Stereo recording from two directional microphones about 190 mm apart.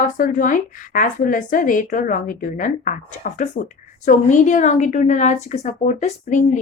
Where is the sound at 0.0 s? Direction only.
45° left (ahead or behind).